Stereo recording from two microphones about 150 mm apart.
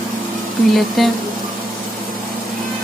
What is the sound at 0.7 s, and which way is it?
Speech, centre (ahead or behind).